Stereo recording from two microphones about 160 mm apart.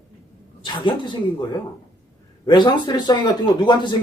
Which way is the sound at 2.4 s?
30° left (ahead or behind).